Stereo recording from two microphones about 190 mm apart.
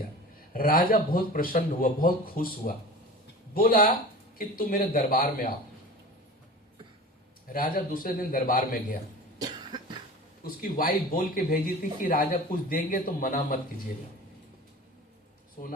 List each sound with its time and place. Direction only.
0.5 s a man's voice: 50° left (ahead or behind)
7.5 s a man's voice: 45° left (ahead or behind)
9.4 s cough: 20° right (ahead or behind)
10.4 s a man's voice: 50° left (ahead or behind)
15.6 s a man's voice: 45° left (ahead or behind)